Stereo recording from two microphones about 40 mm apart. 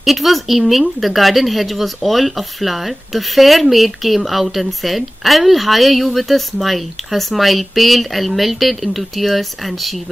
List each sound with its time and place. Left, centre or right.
0.0 s speech: centre